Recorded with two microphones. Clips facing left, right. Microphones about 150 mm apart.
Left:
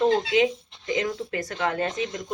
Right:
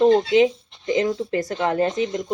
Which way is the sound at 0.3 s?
30° right (ahead or behind).